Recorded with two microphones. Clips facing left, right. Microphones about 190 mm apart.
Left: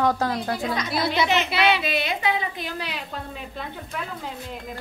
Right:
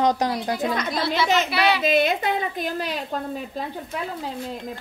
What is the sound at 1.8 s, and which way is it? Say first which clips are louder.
A woman's voice: right 6 dB; 45° right (ahead or behind).